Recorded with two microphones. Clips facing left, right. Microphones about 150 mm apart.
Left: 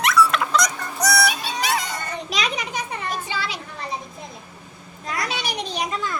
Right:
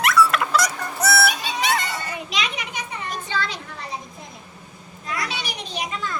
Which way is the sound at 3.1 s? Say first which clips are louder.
Even; 10° left (ahead or behind).